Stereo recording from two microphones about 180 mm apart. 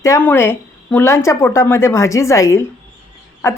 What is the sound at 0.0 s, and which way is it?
Speech, 15° left (ahead or behind).